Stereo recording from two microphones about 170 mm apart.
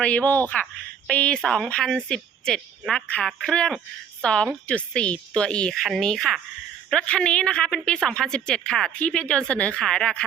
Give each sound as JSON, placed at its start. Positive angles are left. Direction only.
{"t": 0.0, "sound": "a woman's voice", "side_deg": 10}